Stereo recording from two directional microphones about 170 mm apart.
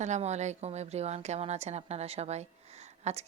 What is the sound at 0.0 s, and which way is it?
A woman's voice, 40° right (ahead or behind).